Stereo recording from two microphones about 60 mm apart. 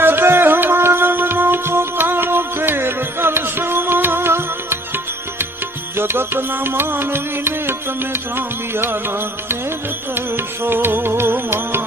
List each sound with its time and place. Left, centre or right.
0.0 s music: right
6.0 s music: right